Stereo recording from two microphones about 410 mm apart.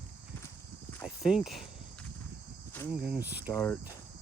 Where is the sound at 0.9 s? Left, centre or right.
Centre.